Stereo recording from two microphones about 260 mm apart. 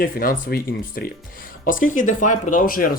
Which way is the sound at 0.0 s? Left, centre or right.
Left.